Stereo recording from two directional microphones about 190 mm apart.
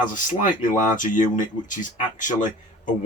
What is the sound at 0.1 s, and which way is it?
Speech, 45° left (ahead or behind).